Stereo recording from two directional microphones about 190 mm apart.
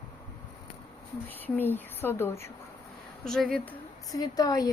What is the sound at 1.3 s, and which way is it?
A woman's voice, 10° left (ahead or behind).